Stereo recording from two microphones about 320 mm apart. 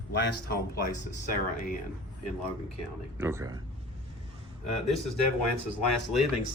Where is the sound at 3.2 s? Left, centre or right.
Centre.